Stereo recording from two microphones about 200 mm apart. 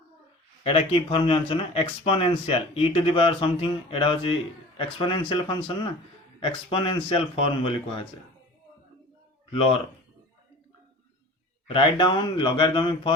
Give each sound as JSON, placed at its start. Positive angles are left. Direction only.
{"t": 0.6, "sound": "speech", "side_deg": 30}
{"t": 11.7, "sound": "speech", "side_deg": 25}